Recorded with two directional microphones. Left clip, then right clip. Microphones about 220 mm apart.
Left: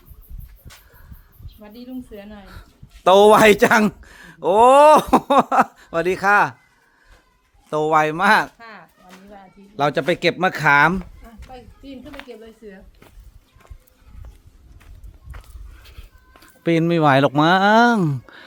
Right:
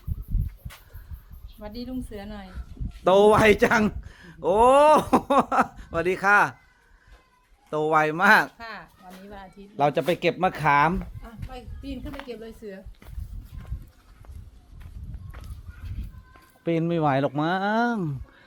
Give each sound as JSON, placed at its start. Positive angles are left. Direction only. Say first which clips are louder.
{"t": 1.6, "sound": "a woman's voice", "louder": "right 1 dB", "side_deg": -30}
{"t": 2.5, "sound": "a man's voice", "louder": "left 1 dB", "side_deg": 30}
{"t": 7.7, "sound": "speech", "louder": "left 5 dB", "side_deg": 20}
{"t": 8.5, "sound": "speech", "louder": "right 2 dB", "side_deg": -50}
{"t": 9.7, "sound": "a man's voice", "louder": "left 3 dB", "side_deg": 20}
{"t": 11.5, "sound": "a sound", "louder": "even", "side_deg": -50}
{"t": 16.4, "sound": "speech", "louder": "left 7 dB", "side_deg": 40}